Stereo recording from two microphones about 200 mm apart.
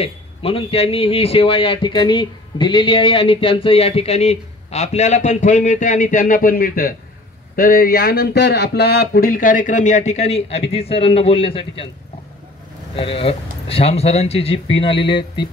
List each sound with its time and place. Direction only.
0.0 s speech: 30° left (ahead or behind)
12.9 s speech: 30° left (ahead or behind)